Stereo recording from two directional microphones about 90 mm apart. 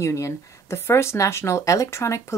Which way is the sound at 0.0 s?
30° left (ahead or behind).